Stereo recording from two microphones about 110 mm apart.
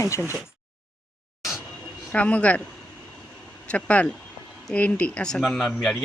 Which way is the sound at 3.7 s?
10° left (ahead or behind).